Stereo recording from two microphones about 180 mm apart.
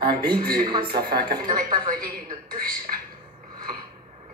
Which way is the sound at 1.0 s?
55° right (ahead or behind).